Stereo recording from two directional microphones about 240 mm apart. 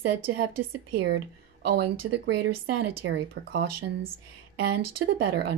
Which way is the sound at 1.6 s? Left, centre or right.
Right.